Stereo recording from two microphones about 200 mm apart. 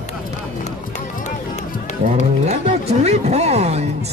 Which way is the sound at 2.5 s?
30° right (ahead or behind).